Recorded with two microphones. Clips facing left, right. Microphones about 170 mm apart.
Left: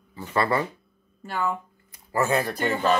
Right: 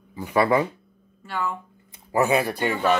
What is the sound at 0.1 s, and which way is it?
Speech, 10° right (ahead or behind).